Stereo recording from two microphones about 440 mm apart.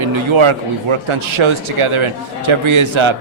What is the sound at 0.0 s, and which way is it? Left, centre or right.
Speech, right.